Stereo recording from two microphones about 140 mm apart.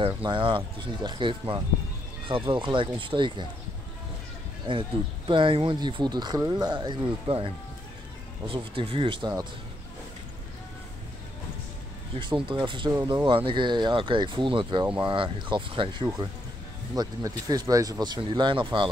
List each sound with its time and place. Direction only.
0.0 s speech: 35° right (ahead or behind)
4.7 s speech: 40° right (ahead or behind)
12.4 s speech: 35° right (ahead or behind)